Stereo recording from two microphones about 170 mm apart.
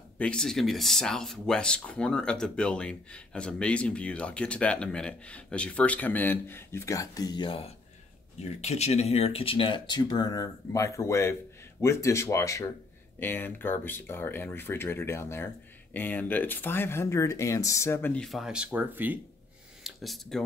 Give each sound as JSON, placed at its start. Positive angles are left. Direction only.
{"t": 0.2, "sound": "speech", "side_deg": 5}
{"t": 19.8, "sound": "speech", "side_deg": 0}